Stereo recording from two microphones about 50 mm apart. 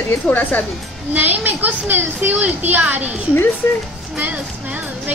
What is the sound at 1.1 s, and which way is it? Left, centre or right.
A woman's voice, right.